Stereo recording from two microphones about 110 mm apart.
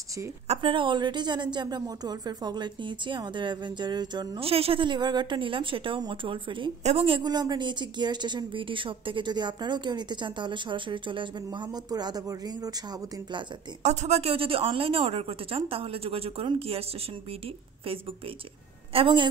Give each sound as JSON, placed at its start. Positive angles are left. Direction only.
{"t": 0.6, "sound": "speech", "side_deg": -50}
{"t": 4.4, "sound": "speech", "side_deg": -60}
{"t": 6.8, "sound": "a woman's voice", "side_deg": -65}
{"t": 7.2, "sound": "speech", "side_deg": -40}
{"t": 13.8, "sound": "a woman's voice", "side_deg": -80}
{"t": 18.9, "sound": "speech", "side_deg": -50}